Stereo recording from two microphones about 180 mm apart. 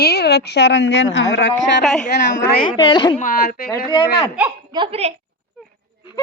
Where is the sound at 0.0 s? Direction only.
65° left (ahead or behind).